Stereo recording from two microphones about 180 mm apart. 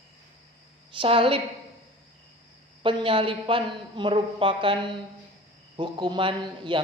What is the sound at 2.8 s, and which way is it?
A man's voice, 30° right (ahead or behind).